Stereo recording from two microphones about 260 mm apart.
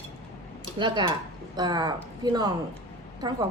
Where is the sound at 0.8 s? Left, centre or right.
Centre.